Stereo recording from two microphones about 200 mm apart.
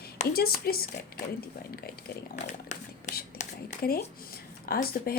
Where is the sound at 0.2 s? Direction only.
50° left (ahead or behind).